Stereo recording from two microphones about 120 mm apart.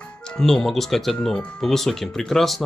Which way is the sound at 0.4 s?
5° left (ahead or behind).